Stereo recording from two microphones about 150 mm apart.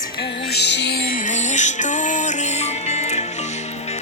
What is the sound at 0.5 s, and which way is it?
Music, 90° left.